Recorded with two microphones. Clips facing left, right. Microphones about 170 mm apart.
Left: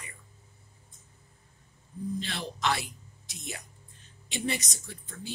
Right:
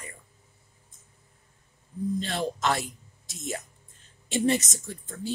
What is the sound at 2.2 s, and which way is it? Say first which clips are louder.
Speech: right 5 dB; 45° right (ahead or behind).